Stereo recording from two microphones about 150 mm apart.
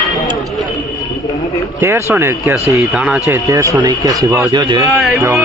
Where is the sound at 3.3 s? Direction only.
20° right (ahead or behind).